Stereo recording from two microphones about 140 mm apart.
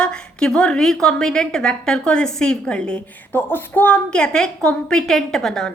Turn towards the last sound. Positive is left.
turn(degrees=0)  # may be behind; listen again after turning